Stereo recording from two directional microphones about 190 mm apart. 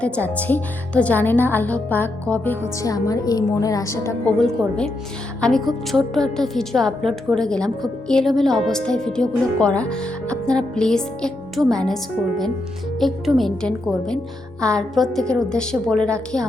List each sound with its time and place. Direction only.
0.0 s a woman's voice: 10° left (ahead or behind)
4.4 s a woman's voice: 5° left (ahead or behind)
13.0 s a woman's voice: centre (ahead or behind)